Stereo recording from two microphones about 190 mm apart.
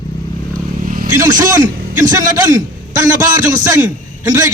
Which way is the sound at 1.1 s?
20° right (ahead or behind).